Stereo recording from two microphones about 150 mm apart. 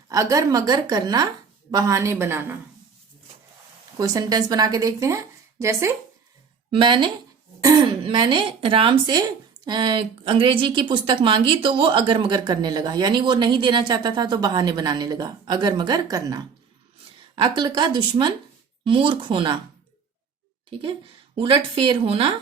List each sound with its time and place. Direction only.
0.1 s a woman's voice: 20° right (ahead or behind)
3.9 s speech: 25° right (ahead or behind)
6.7 s a woman's voice: 35° right (ahead or behind)
21.3 s a woman's voice: 35° right (ahead or behind)